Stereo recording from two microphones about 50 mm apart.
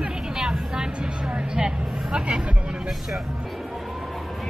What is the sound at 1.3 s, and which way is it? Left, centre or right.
Speech, centre.